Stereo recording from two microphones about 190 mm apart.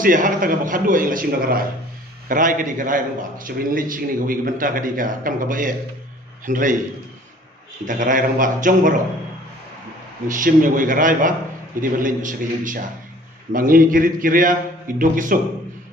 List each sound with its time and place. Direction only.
0.0 s a man's voice: 45° right (ahead or behind)
7.9 s a man's voice: 45° right (ahead or behind)
10.2 s a man's voice: 45° right (ahead or behind)